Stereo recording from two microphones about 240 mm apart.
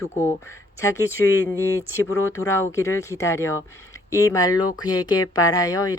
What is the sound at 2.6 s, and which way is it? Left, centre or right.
Speech, centre.